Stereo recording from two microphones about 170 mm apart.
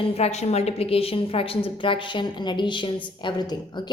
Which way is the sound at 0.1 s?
40° left (ahead or behind).